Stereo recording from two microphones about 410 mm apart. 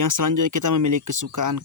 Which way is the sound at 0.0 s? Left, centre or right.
Right.